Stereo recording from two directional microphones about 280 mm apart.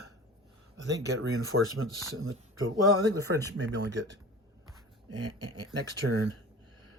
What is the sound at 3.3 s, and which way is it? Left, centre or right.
Speech, right.